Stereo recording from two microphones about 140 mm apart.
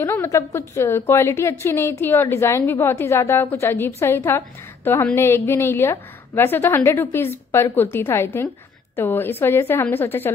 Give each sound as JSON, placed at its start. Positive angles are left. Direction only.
{"t": 0.0, "sound": "a woman's voice", "side_deg": 15}